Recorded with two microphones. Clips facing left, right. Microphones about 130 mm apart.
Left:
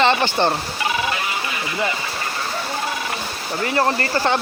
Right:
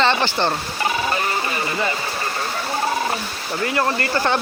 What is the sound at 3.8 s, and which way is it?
Speech, 30° left (ahead or behind).